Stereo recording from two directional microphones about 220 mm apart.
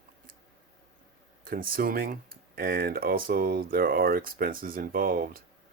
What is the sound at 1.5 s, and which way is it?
Speech, 40° right (ahead or behind).